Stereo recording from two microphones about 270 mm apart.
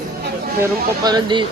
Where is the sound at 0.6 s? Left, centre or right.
Centre.